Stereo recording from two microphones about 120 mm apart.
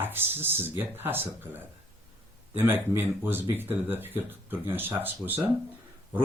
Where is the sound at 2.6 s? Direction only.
20° right (ahead or behind).